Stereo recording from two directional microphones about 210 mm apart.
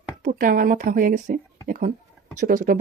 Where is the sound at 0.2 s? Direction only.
40° right (ahead or behind).